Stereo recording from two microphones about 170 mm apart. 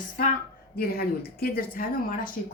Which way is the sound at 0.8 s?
60° left (ahead or behind).